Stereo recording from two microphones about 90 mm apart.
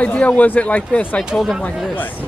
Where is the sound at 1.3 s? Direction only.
5° right (ahead or behind).